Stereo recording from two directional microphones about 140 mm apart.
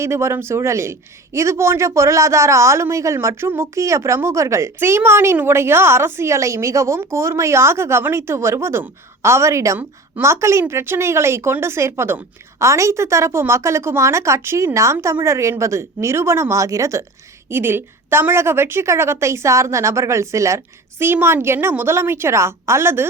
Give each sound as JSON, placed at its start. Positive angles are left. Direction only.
{"t": 0.0, "sound": "a man's voice", "side_deg": -20}